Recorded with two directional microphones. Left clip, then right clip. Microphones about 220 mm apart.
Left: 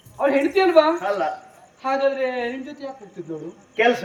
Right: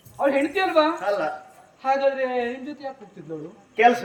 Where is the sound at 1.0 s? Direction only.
15° right (ahead or behind).